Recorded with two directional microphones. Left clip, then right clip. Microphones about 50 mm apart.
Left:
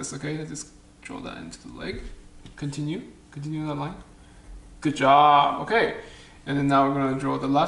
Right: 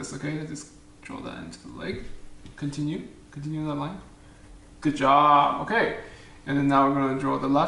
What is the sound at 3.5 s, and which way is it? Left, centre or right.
Speech, centre.